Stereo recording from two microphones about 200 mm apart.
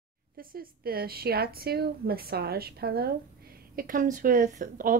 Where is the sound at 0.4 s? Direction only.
45° right (ahead or behind).